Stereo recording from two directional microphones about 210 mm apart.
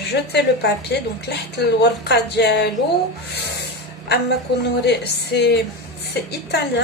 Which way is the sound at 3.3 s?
50° left (ahead or behind).